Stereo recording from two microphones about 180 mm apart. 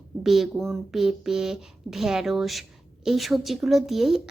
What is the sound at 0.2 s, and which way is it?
Speech, centre (ahead or behind).